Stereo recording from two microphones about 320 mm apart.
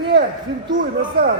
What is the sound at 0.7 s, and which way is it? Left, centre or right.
Speech, right.